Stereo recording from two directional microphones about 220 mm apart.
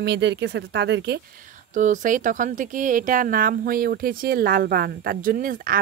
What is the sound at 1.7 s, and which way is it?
Speech, 35° right (ahead or behind).